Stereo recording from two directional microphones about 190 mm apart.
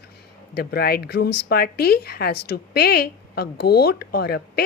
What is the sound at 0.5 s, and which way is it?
Speech, 55° left (ahead or behind).